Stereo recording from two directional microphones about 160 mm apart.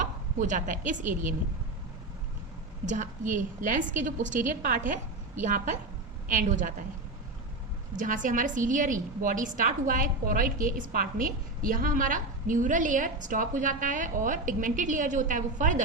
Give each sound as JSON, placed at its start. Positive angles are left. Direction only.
{"t": 0.0, "sound": "a woman's voice", "side_deg": -50}
{"t": 2.8, "sound": "a woman's voice", "side_deg": -50}
{"t": 4.4, "sound": "a woman's voice", "side_deg": -60}
{"t": 7.9, "sound": "a woman's voice", "side_deg": -55}